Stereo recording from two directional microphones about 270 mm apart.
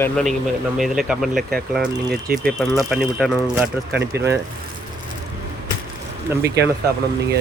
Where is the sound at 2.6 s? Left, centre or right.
Centre.